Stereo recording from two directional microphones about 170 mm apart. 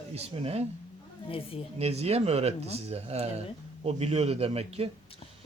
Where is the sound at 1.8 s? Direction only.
40° right (ahead or behind).